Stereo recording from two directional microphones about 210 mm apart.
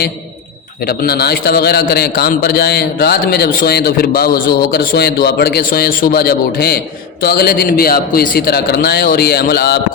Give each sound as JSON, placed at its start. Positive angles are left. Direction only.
{"t": 0.9, "sound": "a man's voice", "side_deg": 45}